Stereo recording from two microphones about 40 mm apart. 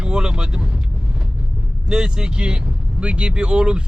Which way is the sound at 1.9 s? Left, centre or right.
Centre.